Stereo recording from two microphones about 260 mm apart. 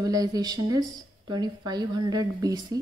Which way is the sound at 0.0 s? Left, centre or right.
Centre.